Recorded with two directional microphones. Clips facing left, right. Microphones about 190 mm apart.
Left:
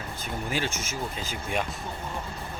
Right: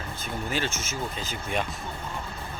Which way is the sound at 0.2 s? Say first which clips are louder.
Even; 15° left (ahead or behind).